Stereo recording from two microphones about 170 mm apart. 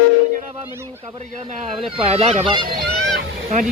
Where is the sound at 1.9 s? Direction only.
35° right (ahead or behind).